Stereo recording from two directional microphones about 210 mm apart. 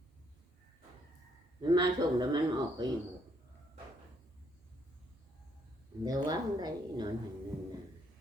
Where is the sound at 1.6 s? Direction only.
20° right (ahead or behind).